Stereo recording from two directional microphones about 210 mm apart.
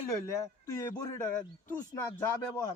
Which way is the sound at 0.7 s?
15° left (ahead or behind).